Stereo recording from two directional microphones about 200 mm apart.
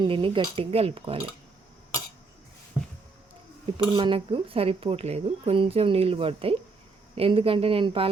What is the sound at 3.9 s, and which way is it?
Speech, 25° right (ahead or behind).